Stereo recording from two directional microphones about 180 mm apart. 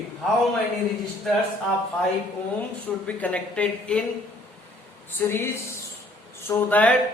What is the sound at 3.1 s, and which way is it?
Speech, 10° left (ahead or behind).